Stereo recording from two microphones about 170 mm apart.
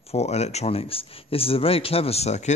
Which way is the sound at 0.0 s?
40° left (ahead or behind).